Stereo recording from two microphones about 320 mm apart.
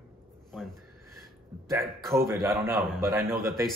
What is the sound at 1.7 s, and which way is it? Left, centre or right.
A man's voice, centre.